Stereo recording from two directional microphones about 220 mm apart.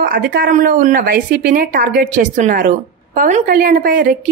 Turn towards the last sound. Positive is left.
turn(degrees=-40)  # may be behind; listen again after turning